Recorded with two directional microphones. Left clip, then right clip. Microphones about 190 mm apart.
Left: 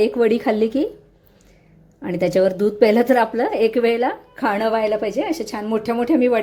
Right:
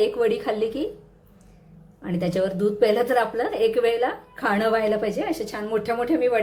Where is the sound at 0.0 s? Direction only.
35° left (ahead or behind).